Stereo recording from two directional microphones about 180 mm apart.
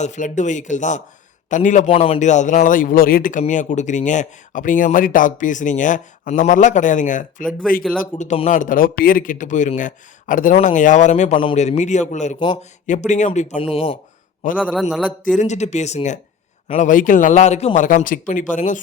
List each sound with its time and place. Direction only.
0.0 s a man's voice: 40° left (ahead or behind)
8.2 s a man's voice: 40° left (ahead or behind)
14.5 s a man's voice: 5° right (ahead or behind)
15.4 s a man's voice: 40° left (ahead or behind)